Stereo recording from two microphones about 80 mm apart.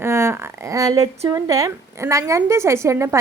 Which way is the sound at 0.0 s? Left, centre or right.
Right.